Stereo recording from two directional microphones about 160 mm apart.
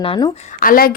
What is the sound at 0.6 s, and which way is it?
Speech, 65° left (ahead or behind).